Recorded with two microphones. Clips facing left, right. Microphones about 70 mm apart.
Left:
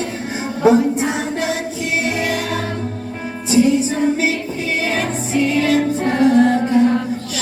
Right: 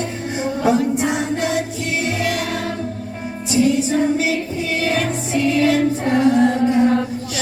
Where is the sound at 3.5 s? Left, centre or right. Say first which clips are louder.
Left 2 dB; left.